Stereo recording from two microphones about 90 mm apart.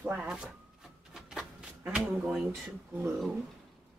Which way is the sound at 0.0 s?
15° right (ahead or behind).